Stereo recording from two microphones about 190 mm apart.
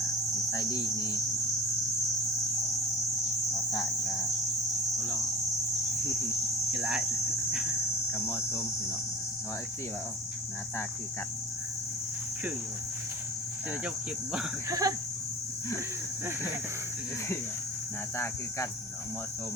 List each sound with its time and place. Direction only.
0.5 s speech: 15° left (ahead or behind)
6.7 s speech: 5° right (ahead or behind)
14.7 s a sound: 20° right (ahead or behind)